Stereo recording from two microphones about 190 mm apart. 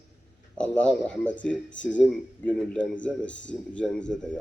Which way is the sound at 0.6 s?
5° left (ahead or behind).